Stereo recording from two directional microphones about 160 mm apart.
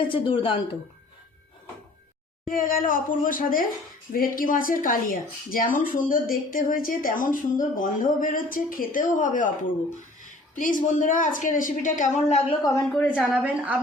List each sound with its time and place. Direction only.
0.0 s speech: 30° left (ahead or behind)
2.5 s speech: 60° left (ahead or behind)
10.5 s speech: 55° left (ahead or behind)
13.1 s a woman's voice: 5° right (ahead or behind)